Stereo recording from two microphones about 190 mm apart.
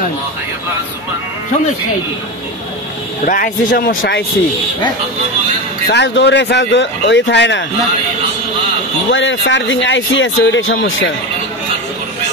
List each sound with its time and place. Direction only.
3.3 s speech: 45° left (ahead or behind)
5.9 s speech: 70° left (ahead or behind)
9.1 s speech: 75° left (ahead or behind)